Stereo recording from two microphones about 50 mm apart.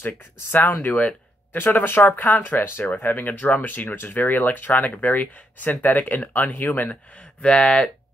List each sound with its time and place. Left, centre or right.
0.0 s speech: left
0.9 s a sound: left
1.6 s speech: left
7.4 s speech: left